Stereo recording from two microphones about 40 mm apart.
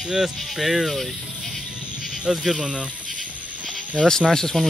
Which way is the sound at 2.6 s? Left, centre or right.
Right.